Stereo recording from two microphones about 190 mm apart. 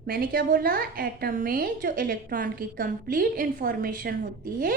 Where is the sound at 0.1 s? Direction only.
50° right (ahead or behind).